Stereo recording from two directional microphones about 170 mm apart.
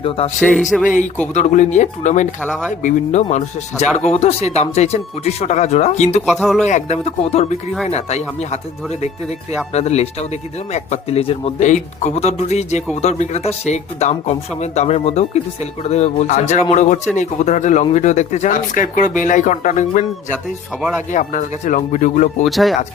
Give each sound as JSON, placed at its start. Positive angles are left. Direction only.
{"t": 0.2, "sound": "speech", "side_deg": 35}
{"t": 0.7, "sound": "speech", "side_deg": 0}
{"t": 1.3, "sound": "speech", "side_deg": 45}
{"t": 2.4, "sound": "speech", "side_deg": 5}
{"t": 2.8, "sound": "speech", "side_deg": 45}
{"t": 6.2, "sound": "speech", "side_deg": 0}
{"t": 6.7, "sound": "speech", "side_deg": 45}
{"t": 9.7, "sound": "speech", "side_deg": 40}
{"t": 21.1, "sound": "speech", "side_deg": 45}
{"t": 22.4, "sound": "speech", "side_deg": 0}